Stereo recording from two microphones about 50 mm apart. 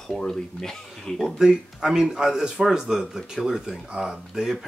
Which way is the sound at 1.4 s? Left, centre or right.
Centre.